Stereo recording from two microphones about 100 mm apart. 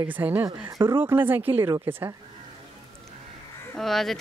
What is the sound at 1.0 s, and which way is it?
Speech, 20° right (ahead or behind).